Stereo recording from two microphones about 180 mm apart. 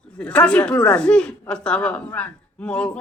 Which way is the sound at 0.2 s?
5° left (ahead or behind).